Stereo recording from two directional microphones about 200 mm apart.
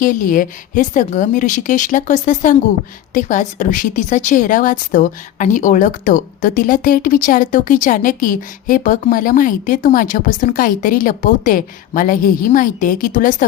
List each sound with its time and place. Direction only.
0.0 s a woman's voice: 40° left (ahead or behind)